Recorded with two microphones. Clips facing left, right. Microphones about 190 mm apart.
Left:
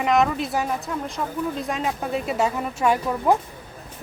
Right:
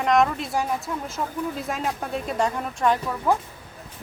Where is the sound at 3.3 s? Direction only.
15° left (ahead or behind).